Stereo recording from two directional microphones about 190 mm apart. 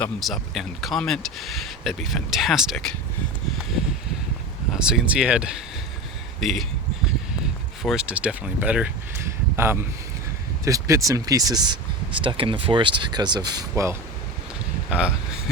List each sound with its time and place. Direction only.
0.0 s speech: centre (ahead or behind)
4.7 s speech: 5° right (ahead or behind)
7.8 s speech: centre (ahead or behind)
10.7 s speech: 15° right (ahead or behind)
14.8 s speech: 5° right (ahead or behind)